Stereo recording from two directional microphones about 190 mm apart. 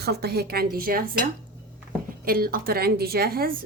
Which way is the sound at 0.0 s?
55° right (ahead or behind).